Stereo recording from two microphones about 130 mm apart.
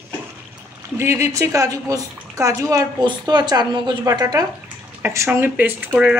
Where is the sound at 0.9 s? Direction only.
20° right (ahead or behind).